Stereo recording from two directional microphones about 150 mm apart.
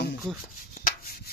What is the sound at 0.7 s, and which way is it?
Rub, 70° left (ahead or behind).